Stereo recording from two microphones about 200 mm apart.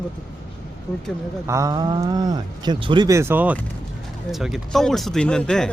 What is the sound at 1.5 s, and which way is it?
Speech, 15° right (ahead or behind).